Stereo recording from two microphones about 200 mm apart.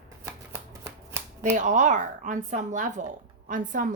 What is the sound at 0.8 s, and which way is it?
Shuffling cards, 10° right (ahead or behind).